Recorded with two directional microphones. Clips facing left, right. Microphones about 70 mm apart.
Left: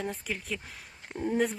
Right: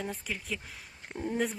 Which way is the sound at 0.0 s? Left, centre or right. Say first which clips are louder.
Left 2 dB; centre.